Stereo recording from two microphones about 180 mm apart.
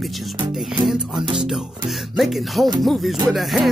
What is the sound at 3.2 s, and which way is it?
Speech, centre (ahead or behind).